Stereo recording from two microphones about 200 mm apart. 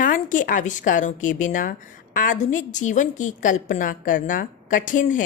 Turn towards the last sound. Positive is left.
turn(degrees=40)  # may be behind; listen again after turning